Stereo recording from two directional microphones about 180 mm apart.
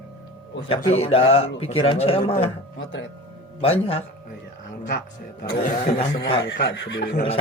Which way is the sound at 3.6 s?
30° left (ahead or behind).